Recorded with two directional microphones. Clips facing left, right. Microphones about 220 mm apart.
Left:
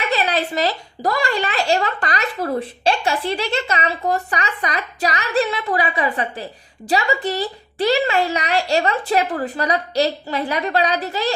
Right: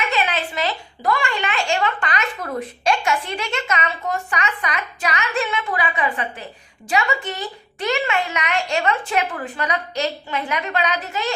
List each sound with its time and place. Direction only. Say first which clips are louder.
0.1 s speech: left 3 dB; 35° left (ahead or behind)